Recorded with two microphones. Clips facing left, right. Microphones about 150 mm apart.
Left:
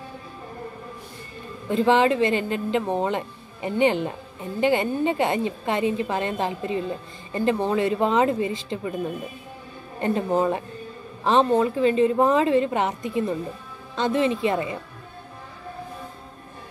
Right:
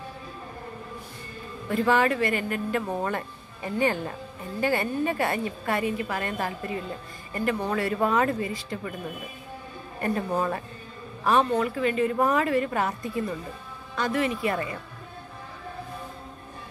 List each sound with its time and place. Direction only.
1.7 s speech: 20° left (ahead or behind)
9.9 s speech: 25° left (ahead or behind)